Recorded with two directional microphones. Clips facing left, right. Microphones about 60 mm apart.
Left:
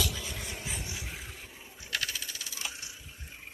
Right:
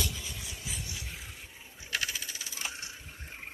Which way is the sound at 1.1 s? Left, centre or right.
Centre.